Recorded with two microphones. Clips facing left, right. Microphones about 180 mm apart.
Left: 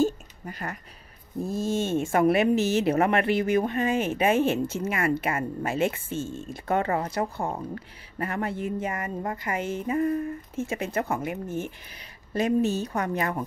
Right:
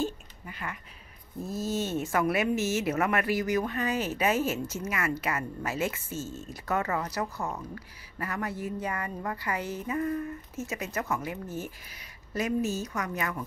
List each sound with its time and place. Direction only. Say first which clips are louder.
0.0 s a sound: left 8 dB; 40° left (ahead or behind)
1.4 s speech: left 4 dB; 25° left (ahead or behind)
12.4 s speech: left 5 dB; 30° left (ahead or behind)